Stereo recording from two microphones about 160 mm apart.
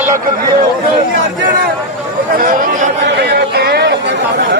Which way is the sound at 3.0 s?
85° right.